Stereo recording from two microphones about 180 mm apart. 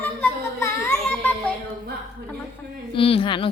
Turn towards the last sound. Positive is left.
turn(degrees=30)  # may be behind; listen again after turning